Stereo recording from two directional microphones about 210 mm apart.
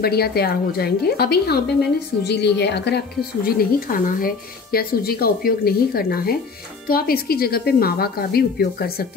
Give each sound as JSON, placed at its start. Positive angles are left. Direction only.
{"t": 0.0, "sound": "speech", "side_deg": 50}
{"t": 3.4, "sound": "speech", "side_deg": 40}